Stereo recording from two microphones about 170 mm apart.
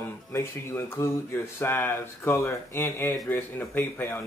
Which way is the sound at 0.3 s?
15° left (ahead or behind).